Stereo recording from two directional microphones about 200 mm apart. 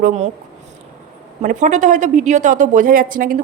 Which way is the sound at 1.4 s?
35° right (ahead or behind).